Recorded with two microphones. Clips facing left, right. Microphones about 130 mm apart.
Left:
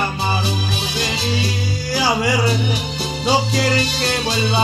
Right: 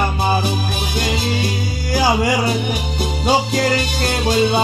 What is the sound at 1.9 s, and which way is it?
Music, 45° right (ahead or behind).